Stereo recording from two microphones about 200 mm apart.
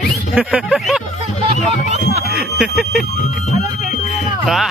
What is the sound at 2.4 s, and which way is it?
Bicycle bell, 5° right (ahead or behind).